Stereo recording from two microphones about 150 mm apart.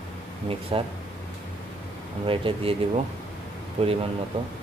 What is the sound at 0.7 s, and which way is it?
Speech, 40° right (ahead or behind).